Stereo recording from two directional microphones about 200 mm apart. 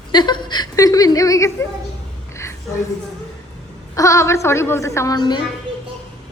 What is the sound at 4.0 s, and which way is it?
A woman's voice, 15° left (ahead or behind).